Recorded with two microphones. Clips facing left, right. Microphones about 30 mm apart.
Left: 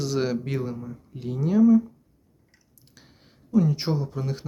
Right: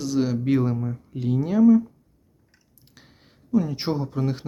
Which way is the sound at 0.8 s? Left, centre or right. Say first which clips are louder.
Right 7 dB; right.